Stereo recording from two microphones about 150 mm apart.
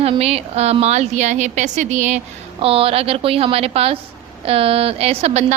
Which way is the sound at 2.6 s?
40° right (ahead or behind).